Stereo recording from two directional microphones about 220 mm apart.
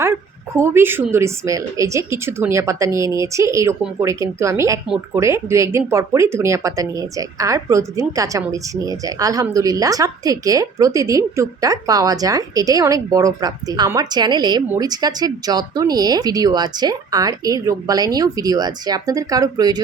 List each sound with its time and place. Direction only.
0.0 s speech: 10° right (ahead or behind)